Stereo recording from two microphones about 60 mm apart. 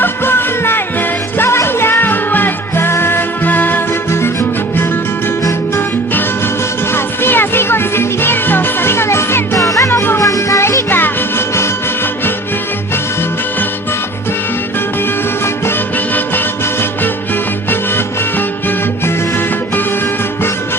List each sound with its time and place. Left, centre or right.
0.0 s music: left
4.1 s music: left
6.9 s music: left
10.6 s music: left